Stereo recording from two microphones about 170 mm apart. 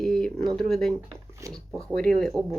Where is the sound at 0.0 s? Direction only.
Centre (ahead or behind).